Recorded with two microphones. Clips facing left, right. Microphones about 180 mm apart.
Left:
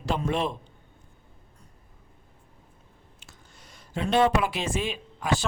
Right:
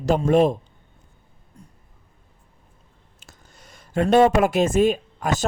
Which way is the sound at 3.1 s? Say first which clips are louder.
Right 5 dB; 40° right (ahead or behind).